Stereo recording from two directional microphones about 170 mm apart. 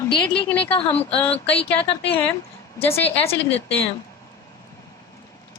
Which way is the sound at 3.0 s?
35° left (ahead or behind).